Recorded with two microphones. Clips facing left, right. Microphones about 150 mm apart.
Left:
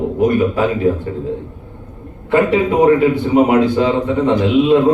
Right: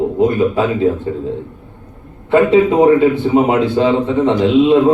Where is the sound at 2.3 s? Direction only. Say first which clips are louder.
Right 3 dB; 20° right (ahead or behind).